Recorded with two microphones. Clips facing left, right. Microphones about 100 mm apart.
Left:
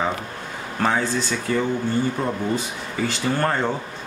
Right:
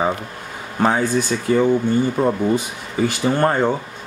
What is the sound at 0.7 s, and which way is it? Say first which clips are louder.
Speech: right 4 dB; 15° right (ahead or behind).